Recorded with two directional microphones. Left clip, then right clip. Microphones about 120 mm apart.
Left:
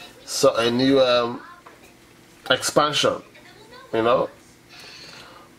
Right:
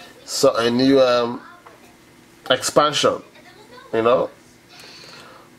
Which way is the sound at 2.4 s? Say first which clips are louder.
Right 3 dB; 5° right (ahead or behind).